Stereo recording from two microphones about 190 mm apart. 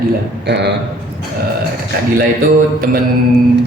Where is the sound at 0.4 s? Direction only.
65° right (ahead or behind).